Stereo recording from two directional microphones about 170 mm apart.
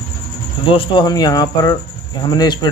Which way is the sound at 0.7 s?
30° left (ahead or behind).